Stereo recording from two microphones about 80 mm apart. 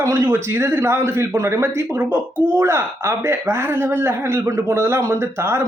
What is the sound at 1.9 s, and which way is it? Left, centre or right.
Speech, right.